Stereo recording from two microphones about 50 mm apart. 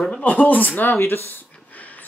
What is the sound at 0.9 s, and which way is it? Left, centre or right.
Speech, left.